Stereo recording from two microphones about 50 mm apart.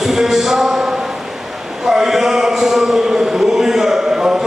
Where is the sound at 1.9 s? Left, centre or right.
Centre.